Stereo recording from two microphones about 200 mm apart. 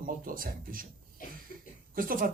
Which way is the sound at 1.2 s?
45° left (ahead or behind).